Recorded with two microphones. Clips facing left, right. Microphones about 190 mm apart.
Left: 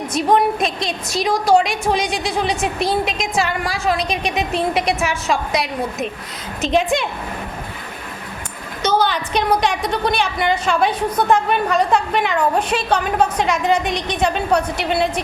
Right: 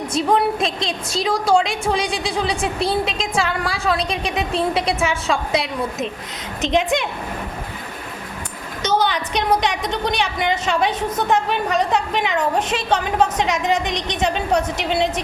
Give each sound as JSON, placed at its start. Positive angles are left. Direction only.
{"t": 0.1, "sound": "a woman's voice", "side_deg": -25}
{"t": 6.6, "sound": "a woman's voice", "side_deg": -15}
{"t": 8.8, "sound": "a woman's voice", "side_deg": -15}